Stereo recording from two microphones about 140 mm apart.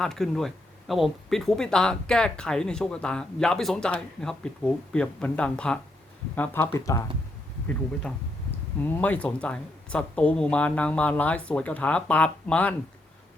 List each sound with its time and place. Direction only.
0.0 s speech: 5° left (ahead or behind); by 7.0 s 20° left (ahead or behind)
8.8 s speech: 10° left (ahead or behind)